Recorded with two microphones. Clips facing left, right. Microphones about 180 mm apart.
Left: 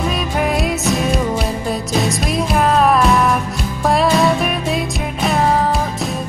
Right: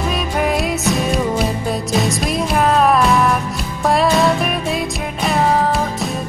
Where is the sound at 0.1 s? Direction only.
Centre (ahead or behind).